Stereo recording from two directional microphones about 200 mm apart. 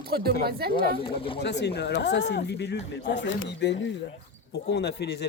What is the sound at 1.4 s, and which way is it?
Speech, 55° left (ahead or behind).